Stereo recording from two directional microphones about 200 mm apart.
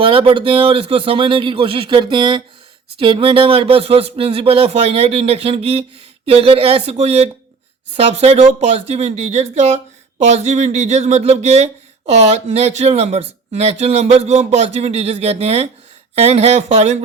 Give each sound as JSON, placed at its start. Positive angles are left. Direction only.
{"t": 0.0, "sound": "speech", "side_deg": -25}